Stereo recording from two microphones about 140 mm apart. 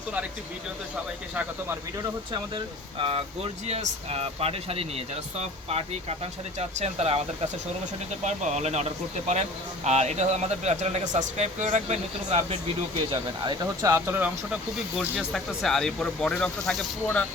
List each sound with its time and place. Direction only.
1.4 s speech: 15° right (ahead or behind)
3.0 s speech: 40° right (ahead or behind)
8.2 s speech: 55° right (ahead or behind); by 14.6 s 15° right (ahead or behind)
15.3 s speech: 5° left (ahead or behind)